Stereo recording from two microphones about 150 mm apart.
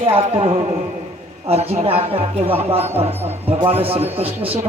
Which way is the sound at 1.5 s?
45° right (ahead or behind).